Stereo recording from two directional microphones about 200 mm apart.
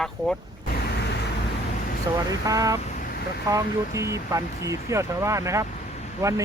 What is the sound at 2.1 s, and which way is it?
Speech, 20° right (ahead or behind).